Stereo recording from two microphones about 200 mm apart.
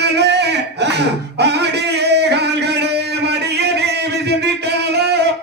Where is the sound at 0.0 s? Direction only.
55° right (ahead or behind).